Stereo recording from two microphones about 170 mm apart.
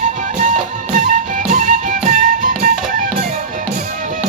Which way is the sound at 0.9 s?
45° right (ahead or behind).